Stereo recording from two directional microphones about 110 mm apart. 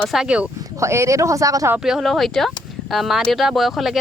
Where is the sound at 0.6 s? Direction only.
25° right (ahead or behind).